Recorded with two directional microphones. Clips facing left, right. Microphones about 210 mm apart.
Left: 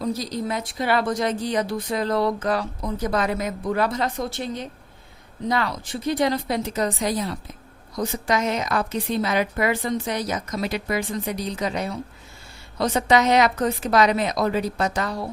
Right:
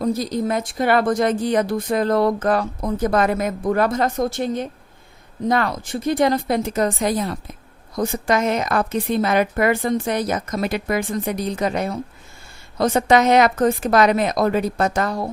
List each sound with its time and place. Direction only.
0.0 s a woman's voice: 50° right (ahead or behind)